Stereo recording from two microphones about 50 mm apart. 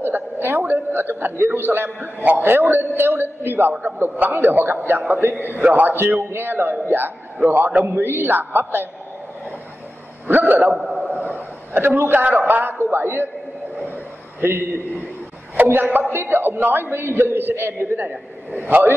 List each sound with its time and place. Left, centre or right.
0.0 s a woman's voice: right
8.0 s a man's voice: right
10.2 s a man's voice: right
10.7 s a sound: centre
11.1 s a sound: right
12.1 s a man's voice: right
14.4 s a man's voice: right
15.5 s a man's voice: right
18.0 s a man's voice: right